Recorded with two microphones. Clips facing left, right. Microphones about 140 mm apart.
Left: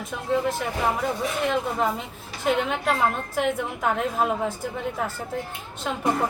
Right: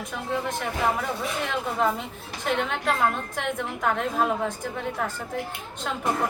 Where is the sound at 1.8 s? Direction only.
Centre (ahead or behind).